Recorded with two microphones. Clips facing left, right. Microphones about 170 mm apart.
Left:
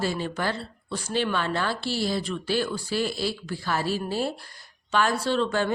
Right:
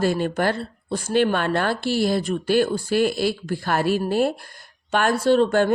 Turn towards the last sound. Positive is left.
turn(degrees=-55)  # may be behind; listen again after turning